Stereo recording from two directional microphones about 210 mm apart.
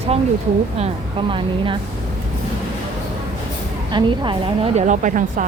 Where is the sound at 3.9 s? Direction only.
20° right (ahead or behind); by 5.4 s 35° right (ahead or behind).